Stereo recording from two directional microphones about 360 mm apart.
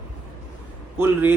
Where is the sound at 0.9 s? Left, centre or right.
Centre.